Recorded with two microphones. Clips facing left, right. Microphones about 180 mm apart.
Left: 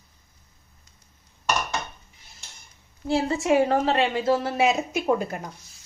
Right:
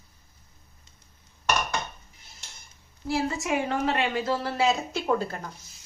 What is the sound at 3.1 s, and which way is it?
A woman's voice, 30° left (ahead or behind).